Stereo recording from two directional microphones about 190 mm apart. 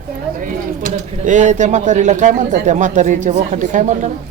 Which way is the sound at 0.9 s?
40° right (ahead or behind).